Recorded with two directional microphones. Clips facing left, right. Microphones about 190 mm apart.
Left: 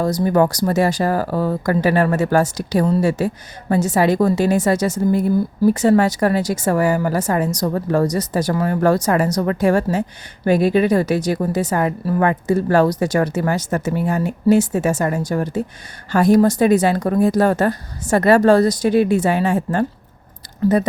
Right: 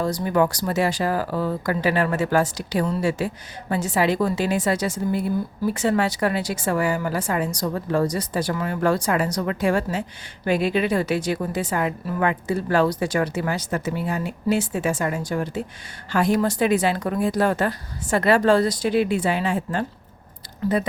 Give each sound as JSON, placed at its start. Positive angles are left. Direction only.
{"t": 0.0, "sound": "speech", "side_deg": 40}